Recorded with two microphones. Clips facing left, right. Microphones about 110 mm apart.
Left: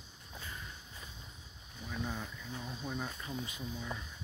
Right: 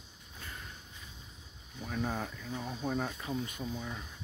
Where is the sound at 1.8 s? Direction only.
55° right (ahead or behind).